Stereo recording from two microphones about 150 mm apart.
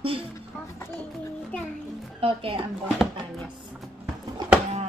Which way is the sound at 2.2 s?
35° right (ahead or behind).